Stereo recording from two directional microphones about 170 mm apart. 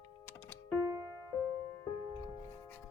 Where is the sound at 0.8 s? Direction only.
20° right (ahead or behind).